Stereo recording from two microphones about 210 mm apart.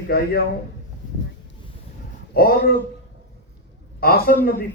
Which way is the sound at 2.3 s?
45° left (ahead or behind).